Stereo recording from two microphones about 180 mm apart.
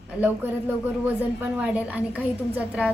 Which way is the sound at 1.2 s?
10° right (ahead or behind).